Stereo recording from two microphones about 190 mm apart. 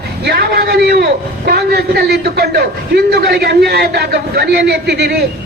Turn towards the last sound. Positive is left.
turn(degrees=-60)  # may be behind; listen again after turning